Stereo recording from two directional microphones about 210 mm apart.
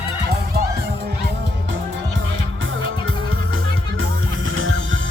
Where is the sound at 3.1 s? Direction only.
75° right (ahead or behind).